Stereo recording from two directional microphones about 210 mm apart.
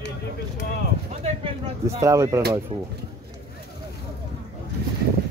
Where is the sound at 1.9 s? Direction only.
15° right (ahead or behind).